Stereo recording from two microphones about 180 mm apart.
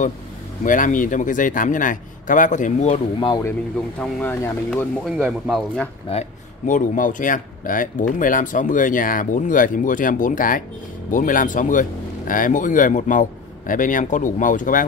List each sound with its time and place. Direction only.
0.7 s speech: 45° left (ahead or behind)
3.8 s speech: 5° left (ahead or behind)
5.0 s speech: centre (ahead or behind)
6.0 s speech: 40° left (ahead or behind)